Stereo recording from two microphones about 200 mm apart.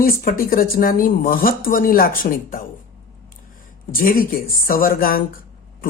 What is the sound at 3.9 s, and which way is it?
A woman's voice, 45° left (ahead or behind).